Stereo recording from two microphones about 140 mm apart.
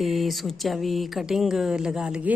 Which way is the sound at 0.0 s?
Centre (ahead or behind).